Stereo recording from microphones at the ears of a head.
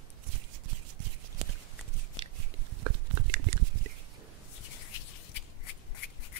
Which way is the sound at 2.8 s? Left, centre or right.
Right.